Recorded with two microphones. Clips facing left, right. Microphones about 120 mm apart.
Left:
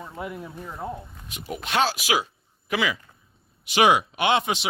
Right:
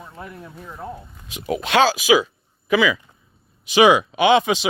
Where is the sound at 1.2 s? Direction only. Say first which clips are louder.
Right 10 dB; 90° right.